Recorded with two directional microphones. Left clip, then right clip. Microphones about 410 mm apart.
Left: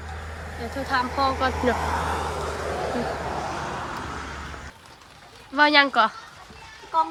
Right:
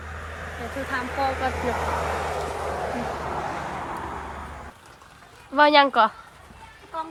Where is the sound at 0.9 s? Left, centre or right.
Centre.